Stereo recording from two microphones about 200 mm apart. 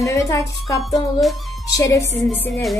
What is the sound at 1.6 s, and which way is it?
Speech, 15° left (ahead or behind).